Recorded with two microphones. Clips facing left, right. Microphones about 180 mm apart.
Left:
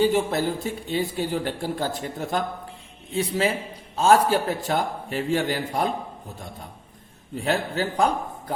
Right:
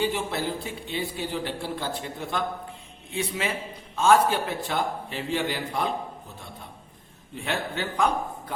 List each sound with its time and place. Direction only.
0.0 s a man's voice: 45° left (ahead or behind)
7.4 s a man's voice: 35° left (ahead or behind)